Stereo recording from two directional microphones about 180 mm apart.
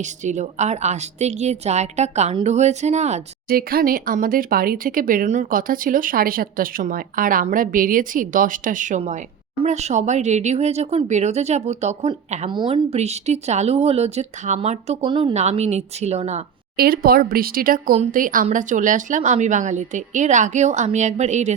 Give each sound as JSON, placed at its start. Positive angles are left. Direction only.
{"t": 0.0, "sound": "speech", "side_deg": -40}
{"t": 3.5, "sound": "speech", "side_deg": -55}
{"t": 12.5, "sound": "speech", "side_deg": -25}
{"t": 16.7, "sound": "speech", "side_deg": -55}